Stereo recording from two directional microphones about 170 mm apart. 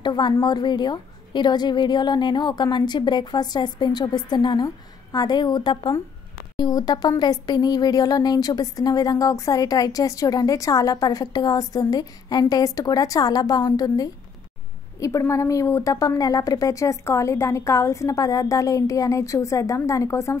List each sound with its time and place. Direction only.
0.0 s speech: 25° left (ahead or behind)